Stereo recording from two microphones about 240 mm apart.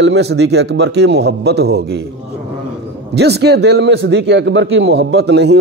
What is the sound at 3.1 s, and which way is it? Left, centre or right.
A man's voice, right.